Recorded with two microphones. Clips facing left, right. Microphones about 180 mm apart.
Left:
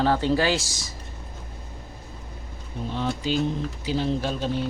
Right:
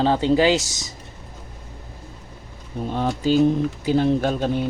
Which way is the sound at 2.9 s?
50° right (ahead or behind).